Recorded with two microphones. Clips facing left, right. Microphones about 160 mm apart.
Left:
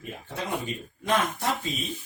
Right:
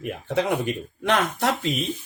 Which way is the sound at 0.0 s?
75° right (ahead or behind).